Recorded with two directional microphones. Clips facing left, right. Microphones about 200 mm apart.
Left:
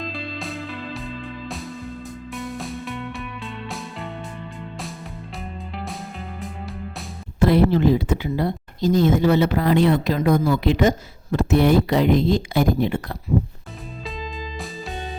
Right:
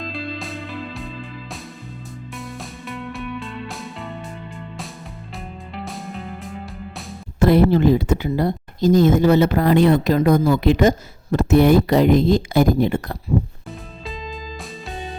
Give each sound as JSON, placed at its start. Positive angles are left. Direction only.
{"t": 0.0, "sound": "music", "side_deg": 0}
{"t": 5.7, "sound": "music", "side_deg": 0}
{"t": 7.3, "sound": "speech", "side_deg": -45}
{"t": 14.0, "sound": "music", "side_deg": 0}